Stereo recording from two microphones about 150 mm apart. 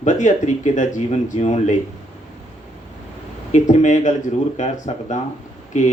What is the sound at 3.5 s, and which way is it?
Speech, 55° left (ahead or behind).